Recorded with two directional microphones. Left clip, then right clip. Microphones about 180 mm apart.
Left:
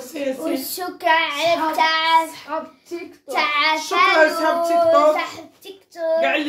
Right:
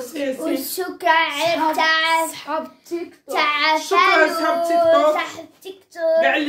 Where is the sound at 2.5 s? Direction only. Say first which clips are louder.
Right 2 dB; 85° right.